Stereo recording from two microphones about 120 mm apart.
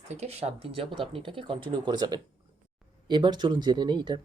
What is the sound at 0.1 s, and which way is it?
Speech, 65° right (ahead or behind).